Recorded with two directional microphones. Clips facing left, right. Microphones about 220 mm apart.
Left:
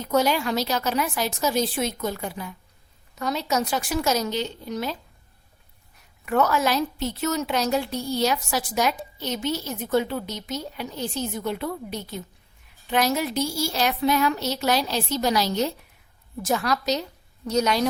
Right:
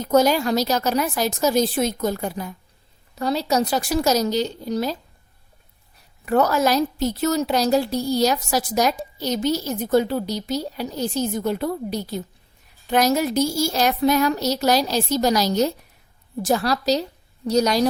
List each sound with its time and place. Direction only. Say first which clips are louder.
0.0 s a woman's voice: right 5 dB; 40° right (ahead or behind)
6.2 s a woman's voice: right 3 dB; 35° right (ahead or behind)